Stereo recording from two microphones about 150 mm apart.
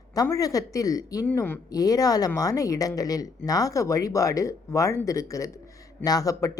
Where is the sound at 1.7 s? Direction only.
25° left (ahead or behind).